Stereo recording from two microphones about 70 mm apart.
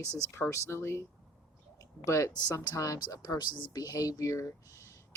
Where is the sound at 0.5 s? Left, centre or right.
Left.